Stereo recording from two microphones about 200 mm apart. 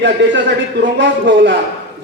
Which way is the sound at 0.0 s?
60° right (ahead or behind).